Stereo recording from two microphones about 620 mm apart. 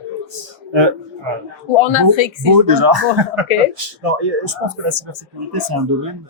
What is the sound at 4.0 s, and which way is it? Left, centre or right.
Speech, right.